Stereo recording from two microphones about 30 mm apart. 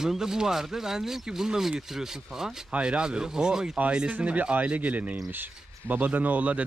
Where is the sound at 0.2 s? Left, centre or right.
Centre.